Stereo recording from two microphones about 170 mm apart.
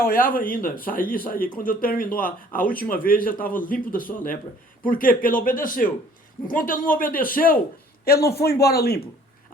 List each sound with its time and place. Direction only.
0.1 s speech: 55° left (ahead or behind)
8.3 s speech: 65° left (ahead or behind)